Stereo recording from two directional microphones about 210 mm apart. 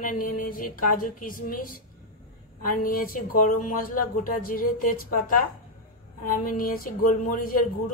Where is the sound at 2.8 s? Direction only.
40° left (ahead or behind).